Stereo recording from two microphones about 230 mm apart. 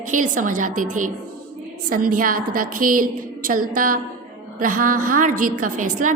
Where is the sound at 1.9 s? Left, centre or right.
Right.